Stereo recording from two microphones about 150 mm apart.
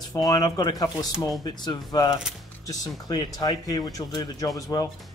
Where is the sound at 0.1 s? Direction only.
25° left (ahead or behind).